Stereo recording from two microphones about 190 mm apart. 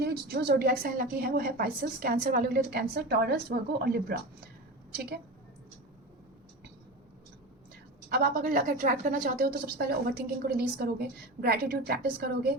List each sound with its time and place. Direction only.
0.0 s a woman's voice: 55° right (ahead or behind)
8.1 s a woman's voice: 50° right (ahead or behind)